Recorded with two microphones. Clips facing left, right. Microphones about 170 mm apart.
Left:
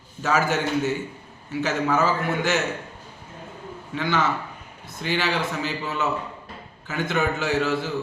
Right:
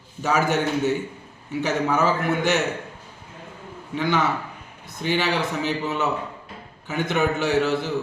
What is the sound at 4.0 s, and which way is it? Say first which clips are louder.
A man's voice: right 1 dB; 15° right (ahead or behind).